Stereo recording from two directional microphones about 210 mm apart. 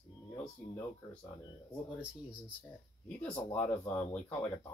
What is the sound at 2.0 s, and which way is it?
Speech, 5° right (ahead or behind).